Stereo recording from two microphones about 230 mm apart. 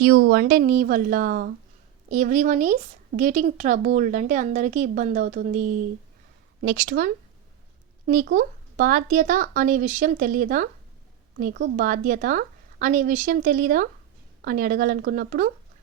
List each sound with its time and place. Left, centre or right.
0.2 s speech: right